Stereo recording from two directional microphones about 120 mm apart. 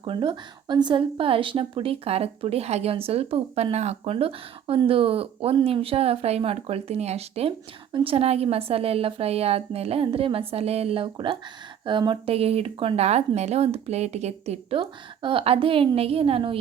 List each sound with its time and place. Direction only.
0.0 s a woman's voice: 45° right (ahead or behind); by 14.8 s 60° right (ahead or behind)
14.8 s speech: 45° right (ahead or behind)